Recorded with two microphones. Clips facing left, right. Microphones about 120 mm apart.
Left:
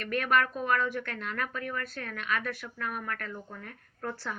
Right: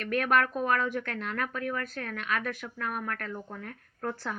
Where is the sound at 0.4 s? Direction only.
Centre (ahead or behind).